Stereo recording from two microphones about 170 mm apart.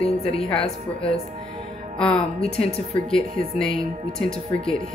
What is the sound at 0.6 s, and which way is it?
Speech, 35° left (ahead or behind).